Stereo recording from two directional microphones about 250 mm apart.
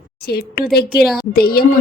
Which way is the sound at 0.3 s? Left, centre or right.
Left.